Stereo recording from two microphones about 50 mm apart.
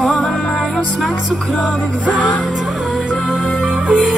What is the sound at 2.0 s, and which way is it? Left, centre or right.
Music, right.